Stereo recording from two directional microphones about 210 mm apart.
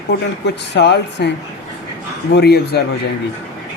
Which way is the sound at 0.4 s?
55° left (ahead or behind).